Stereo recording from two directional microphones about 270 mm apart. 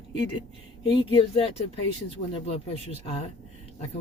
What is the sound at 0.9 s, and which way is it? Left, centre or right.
Speech, centre.